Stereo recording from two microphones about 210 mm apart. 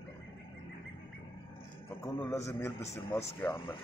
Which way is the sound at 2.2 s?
15° left (ahead or behind).